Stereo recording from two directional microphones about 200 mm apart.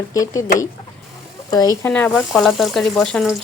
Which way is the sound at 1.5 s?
20° left (ahead or behind).